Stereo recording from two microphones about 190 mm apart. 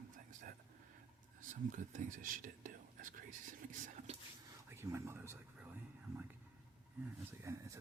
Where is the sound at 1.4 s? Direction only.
40° right (ahead or behind).